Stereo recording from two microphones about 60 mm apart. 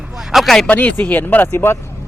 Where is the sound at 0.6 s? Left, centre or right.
Left.